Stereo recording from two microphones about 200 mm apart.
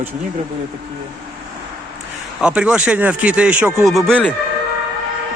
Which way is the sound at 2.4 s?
5° right (ahead or behind).